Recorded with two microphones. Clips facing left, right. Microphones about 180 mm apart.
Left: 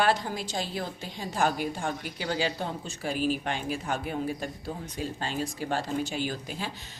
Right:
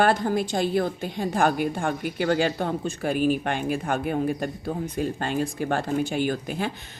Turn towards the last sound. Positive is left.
turn(degrees=-55)  # may be behind; listen again after turning